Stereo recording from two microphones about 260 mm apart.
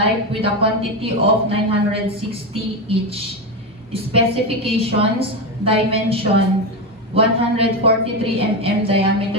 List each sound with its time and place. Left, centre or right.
0.3 s a woman's voice: right